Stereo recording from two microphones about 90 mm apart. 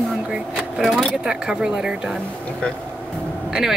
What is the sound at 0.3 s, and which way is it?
Speech, 5° right (ahead or behind).